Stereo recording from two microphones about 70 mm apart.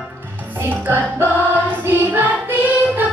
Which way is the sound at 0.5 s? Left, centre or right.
Right.